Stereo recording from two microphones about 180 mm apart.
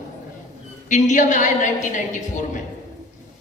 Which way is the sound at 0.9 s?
40° left (ahead or behind).